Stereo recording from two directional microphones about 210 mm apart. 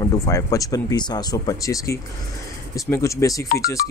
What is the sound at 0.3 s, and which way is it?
Speech, 15° left (ahead or behind).